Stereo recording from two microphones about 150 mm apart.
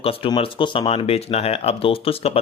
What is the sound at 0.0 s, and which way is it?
Speech, 40° left (ahead or behind).